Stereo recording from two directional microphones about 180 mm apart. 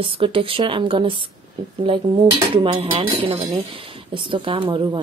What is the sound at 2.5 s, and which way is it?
A woman's voice, 30° right (ahead or behind).